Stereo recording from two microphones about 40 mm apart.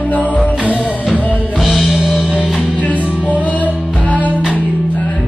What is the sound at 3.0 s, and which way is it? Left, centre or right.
Music, right.